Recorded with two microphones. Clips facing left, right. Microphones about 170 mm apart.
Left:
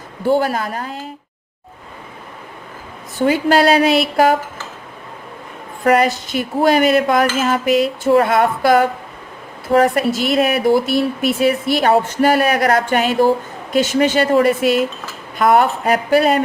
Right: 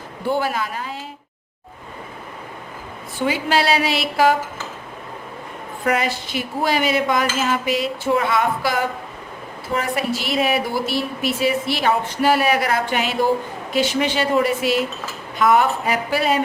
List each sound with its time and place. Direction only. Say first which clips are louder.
0.3 s dishes: left 4 dB; 45° left (ahead or behind)
3.2 s dishes: left 6 dB; 45° left (ahead or behind)
5.8 s dishes: left 7 dB; 45° left (ahead or behind)